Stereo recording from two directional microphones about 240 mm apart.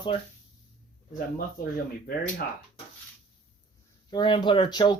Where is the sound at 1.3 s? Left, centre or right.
Left.